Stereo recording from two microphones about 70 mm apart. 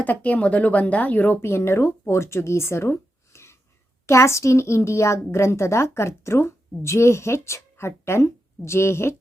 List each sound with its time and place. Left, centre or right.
0.0 s speech: left
1.4 s a child's voice: left